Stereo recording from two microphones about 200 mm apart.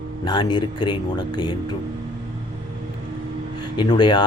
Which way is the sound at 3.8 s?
25° left (ahead or behind).